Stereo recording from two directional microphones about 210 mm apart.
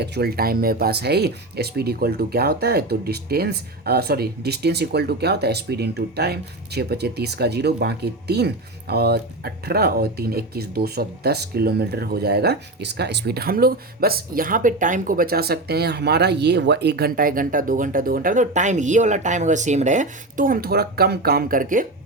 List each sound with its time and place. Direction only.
0.0 s speech: 50° right (ahead or behind)